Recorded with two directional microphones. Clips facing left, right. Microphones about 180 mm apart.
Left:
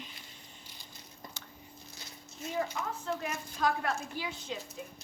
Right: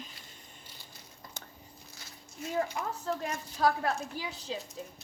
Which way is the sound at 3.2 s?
35° right (ahead or behind).